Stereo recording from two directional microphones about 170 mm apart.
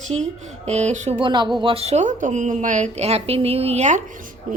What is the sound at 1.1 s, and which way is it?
A woman's voice, 25° right (ahead or behind).